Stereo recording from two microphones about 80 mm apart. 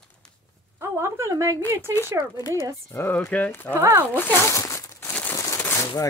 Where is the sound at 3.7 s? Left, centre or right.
Right.